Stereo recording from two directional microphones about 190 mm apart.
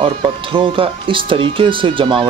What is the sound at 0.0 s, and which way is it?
Speech, 25° right (ahead or behind).